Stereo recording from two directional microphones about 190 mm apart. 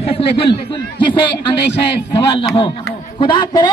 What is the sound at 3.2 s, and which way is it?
Speech, 25° left (ahead or behind).